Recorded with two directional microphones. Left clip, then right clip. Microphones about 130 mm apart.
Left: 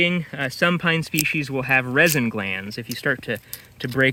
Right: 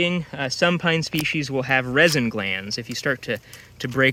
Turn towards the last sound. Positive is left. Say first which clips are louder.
# even
turn(degrees=35)  # may be behind; listen again after turning